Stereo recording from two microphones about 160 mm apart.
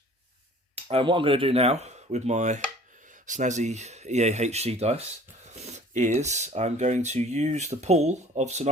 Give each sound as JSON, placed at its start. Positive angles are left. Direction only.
{"t": 0.8, "sound": "speech", "side_deg": -35}